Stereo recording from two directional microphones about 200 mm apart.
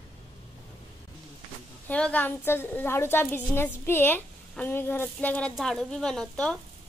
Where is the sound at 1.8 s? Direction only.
5° left (ahead or behind).